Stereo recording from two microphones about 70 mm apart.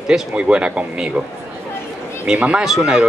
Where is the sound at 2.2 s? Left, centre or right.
Centre.